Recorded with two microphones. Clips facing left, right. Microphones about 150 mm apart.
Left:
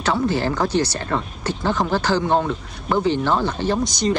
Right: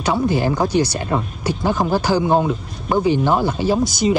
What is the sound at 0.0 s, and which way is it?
Speech, 15° right (ahead or behind).